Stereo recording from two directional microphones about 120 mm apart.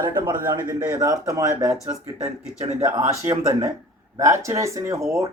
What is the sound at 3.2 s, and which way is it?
Speech, 25° right (ahead or behind).